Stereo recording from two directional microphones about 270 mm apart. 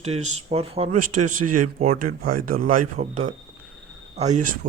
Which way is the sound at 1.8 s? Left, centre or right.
Right.